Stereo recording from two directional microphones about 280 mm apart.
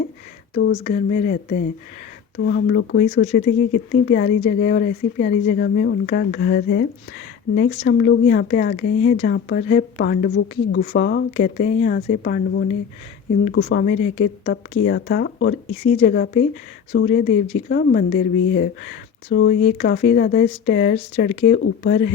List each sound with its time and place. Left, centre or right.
0.5 s speech: left